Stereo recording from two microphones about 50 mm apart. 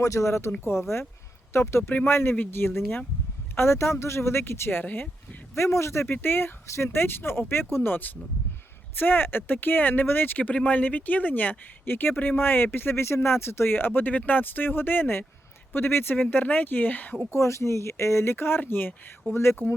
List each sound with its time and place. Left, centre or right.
0.0 s speech: left
2.0 s speech: left
4.8 s speech: left
5.5 s speech: left
7.9 s speech: left
10.5 s speech: left
16.3 s speech: left
17.3 s speech: left
18.3 s speech: left
19.3 s speech: left